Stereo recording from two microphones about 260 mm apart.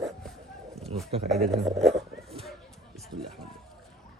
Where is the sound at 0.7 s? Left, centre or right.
Right.